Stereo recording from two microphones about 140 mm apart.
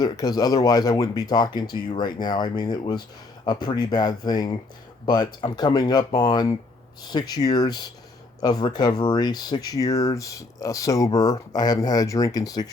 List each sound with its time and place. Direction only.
0.0 s speech: 30° left (ahead or behind)